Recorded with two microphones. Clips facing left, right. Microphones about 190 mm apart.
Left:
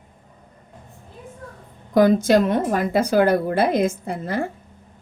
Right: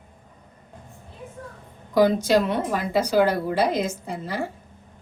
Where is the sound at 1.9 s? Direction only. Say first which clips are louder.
Left 3 dB; 50° left (ahead or behind).